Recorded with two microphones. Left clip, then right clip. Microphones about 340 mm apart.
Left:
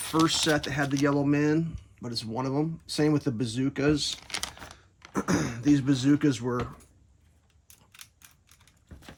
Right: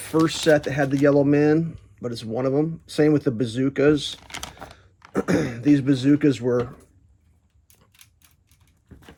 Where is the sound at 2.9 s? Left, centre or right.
Left.